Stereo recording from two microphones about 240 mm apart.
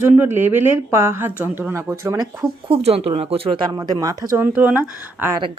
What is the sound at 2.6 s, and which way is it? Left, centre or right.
Speech, right.